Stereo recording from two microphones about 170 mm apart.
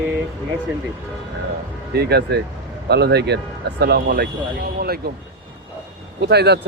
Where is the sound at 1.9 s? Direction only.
75° right (ahead or behind).